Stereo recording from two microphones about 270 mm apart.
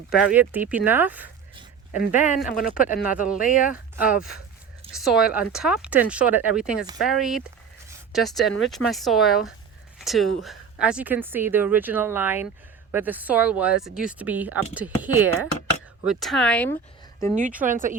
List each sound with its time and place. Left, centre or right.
0.1 s speech: centre
1.9 s speech: left
3.7 s speech: centre
17.6 s speech: right